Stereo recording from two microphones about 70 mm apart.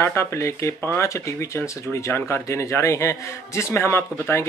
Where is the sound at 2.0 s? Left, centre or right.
Left.